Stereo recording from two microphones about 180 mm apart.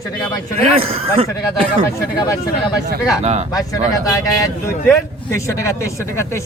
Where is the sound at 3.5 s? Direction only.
20° left (ahead or behind).